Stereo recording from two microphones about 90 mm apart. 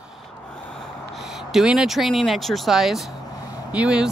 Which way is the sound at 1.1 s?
5° right (ahead or behind).